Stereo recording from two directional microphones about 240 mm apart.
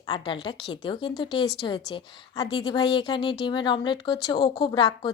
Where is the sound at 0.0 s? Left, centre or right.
Centre.